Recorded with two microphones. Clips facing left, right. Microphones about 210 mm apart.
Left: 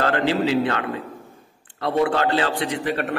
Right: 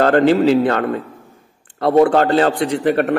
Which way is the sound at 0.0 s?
50° right (ahead or behind).